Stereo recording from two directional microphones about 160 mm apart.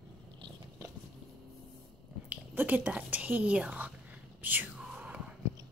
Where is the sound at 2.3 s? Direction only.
10° right (ahead or behind).